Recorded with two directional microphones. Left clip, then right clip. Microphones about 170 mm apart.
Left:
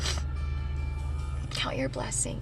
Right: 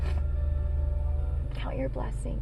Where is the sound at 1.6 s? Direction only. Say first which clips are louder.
Left 4 dB; 15° left (ahead or behind).